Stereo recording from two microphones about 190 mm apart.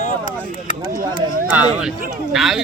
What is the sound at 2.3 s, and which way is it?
Speech, centre (ahead or behind).